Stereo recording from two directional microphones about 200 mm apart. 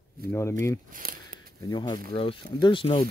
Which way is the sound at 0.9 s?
45° right (ahead or behind).